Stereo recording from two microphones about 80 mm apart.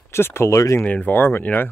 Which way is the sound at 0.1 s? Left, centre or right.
Left.